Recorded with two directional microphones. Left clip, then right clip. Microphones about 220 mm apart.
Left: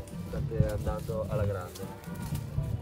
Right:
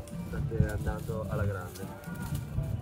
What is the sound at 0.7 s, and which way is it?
Speech, 25° left (ahead or behind).